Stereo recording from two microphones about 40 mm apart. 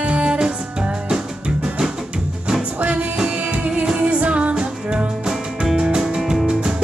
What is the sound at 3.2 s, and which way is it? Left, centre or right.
Music, right.